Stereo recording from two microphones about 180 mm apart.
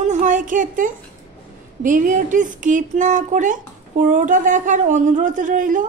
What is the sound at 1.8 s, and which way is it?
Speech, 45° right (ahead or behind).